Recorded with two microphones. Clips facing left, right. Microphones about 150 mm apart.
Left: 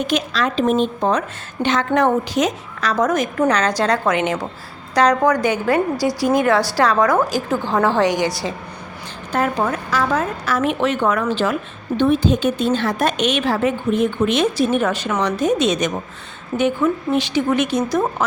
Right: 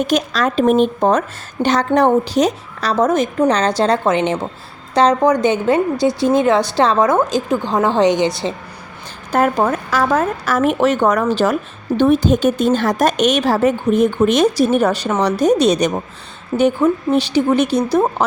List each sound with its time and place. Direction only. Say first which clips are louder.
0.0 s a woman's voice: right 3 dB; 45° right (ahead or behind); by 8.5 s 20° right (ahead or behind)
9.3 s a woman's voice: right 4 dB; 45° right (ahead or behind)